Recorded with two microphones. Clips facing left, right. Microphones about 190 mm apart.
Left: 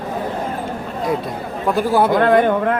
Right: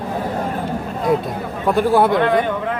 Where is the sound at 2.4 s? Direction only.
55° left (ahead or behind).